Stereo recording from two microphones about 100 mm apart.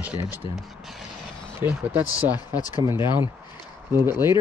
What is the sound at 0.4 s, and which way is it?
Speech, 65° left (ahead or behind).